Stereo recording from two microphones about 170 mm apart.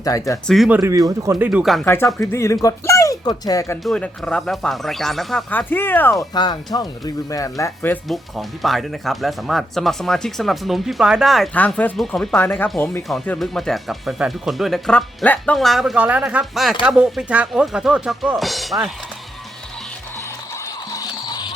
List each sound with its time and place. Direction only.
0.0 s speech: 20° left (ahead or behind)
0.4 s speech: centre (ahead or behind)
0.7 s speech: 15° right (ahead or behind)
1.5 s speech: 5° right (ahead or behind)
1.9 s speech: 15° left (ahead or behind)
3.8 s speech: 5° left (ahead or behind)
6.3 s speech: 25° left (ahead or behind)
8.0 s speech: centre (ahead or behind)
12.6 s speech: centre (ahead or behind)
20.9 s music: 20° left (ahead or behind)